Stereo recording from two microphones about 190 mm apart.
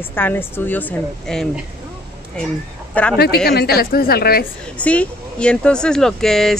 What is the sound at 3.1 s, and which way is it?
A woman's voice, 55° left (ahead or behind).